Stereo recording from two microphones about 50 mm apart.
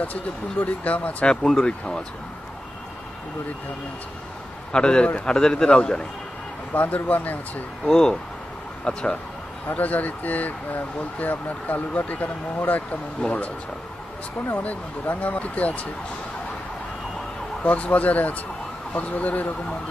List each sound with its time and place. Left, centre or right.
0.0 s speech: left
1.3 s a man's voice: centre
4.7 s a man's voice: centre
6.7 s speech: left
7.8 s a man's voice: centre
9.7 s speech: left
14.5 s speech: left
17.6 s speech: left